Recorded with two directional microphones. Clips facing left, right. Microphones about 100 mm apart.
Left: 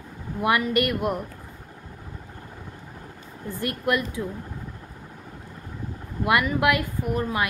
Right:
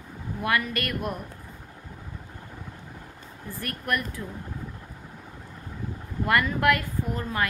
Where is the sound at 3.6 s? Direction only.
20° left (ahead or behind).